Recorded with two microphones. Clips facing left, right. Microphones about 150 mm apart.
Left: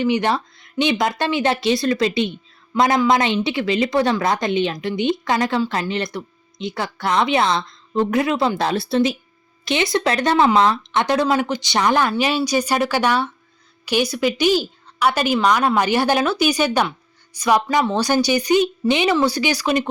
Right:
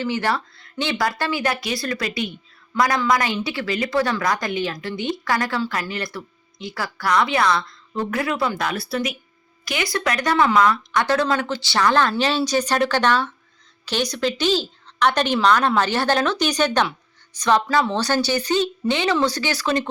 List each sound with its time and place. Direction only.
0.0 s speech: 20° left (ahead or behind)
11.0 s speech: 15° left (ahead or behind)